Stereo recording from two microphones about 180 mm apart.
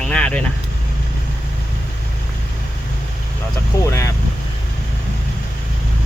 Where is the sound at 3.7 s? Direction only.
20° left (ahead or behind).